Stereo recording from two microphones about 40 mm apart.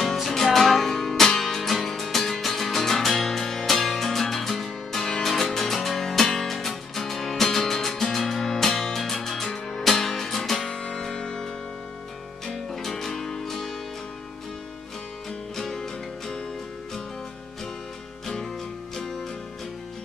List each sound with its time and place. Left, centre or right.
0.1 s music: centre
12.6 s music: centre
15.5 s music: centre
18.2 s music: centre